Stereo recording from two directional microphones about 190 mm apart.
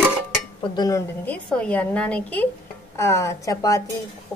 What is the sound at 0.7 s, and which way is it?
Speech, 15° left (ahead or behind).